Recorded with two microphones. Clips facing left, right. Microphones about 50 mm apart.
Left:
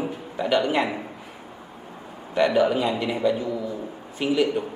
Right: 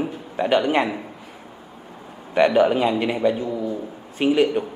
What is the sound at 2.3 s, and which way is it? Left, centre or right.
A man's voice, right.